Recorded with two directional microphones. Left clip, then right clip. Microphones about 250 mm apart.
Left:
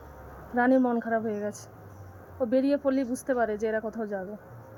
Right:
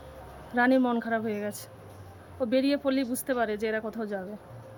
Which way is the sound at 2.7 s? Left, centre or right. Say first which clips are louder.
Left 1 dB; centre.